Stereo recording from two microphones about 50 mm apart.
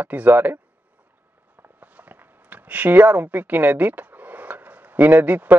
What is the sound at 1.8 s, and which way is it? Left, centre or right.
Speech, right.